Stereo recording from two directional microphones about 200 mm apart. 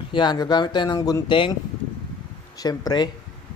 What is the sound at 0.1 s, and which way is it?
Speech, 20° left (ahead or behind).